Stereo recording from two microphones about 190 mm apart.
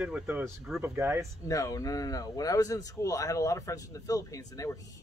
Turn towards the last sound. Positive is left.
turn(degrees=15)  # may be behind; listen again after turning